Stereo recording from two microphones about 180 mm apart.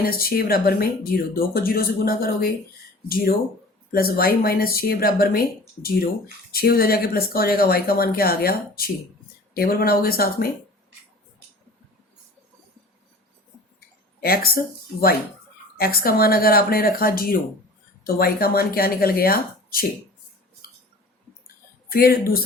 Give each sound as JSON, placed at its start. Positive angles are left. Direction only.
{"t": 0.0, "sound": "speech", "side_deg": 55}
{"t": 3.9, "sound": "speech", "side_deg": 55}
{"t": 14.2, "sound": "speech", "side_deg": 55}
{"t": 15.8, "sound": "speech", "side_deg": 60}
{"t": 21.4, "sound": "a sound", "side_deg": 55}